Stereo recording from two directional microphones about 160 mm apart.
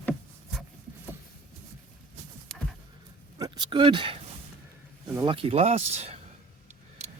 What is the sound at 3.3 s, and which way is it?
Speech, 25° right (ahead or behind).